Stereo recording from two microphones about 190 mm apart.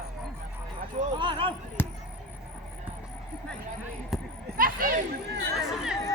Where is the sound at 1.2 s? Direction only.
25° right (ahead or behind).